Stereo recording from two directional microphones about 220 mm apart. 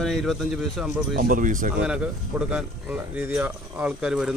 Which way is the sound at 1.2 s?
40° right (ahead or behind).